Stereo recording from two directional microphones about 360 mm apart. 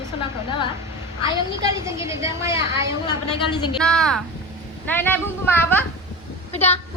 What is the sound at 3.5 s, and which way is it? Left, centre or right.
A woman's voice, centre.